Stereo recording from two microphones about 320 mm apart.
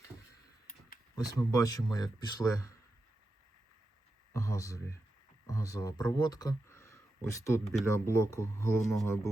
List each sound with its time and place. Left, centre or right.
1.3 s speech: centre
4.4 s speech: centre